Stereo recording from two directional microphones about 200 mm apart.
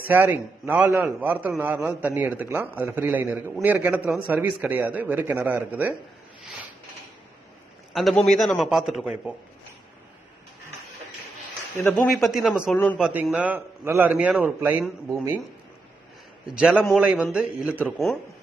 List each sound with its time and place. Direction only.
0.0 s a man's voice: 10° right (ahead or behind)
7.9 s a man's voice: centre (ahead or behind)
11.7 s a man's voice: 5° left (ahead or behind)
13.1 s a man's voice: 10° right (ahead or behind)
16.4 s a man's voice: 5° right (ahead or behind)